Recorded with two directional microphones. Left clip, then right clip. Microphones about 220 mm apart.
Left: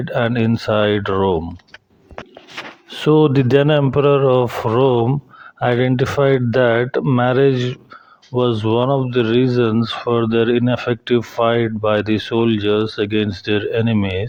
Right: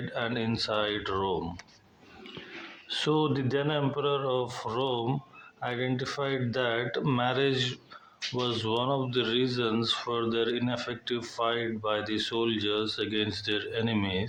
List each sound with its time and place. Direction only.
0.1 s speech: 40° left (ahead or behind)
3.0 s speech: 40° left (ahead or behind)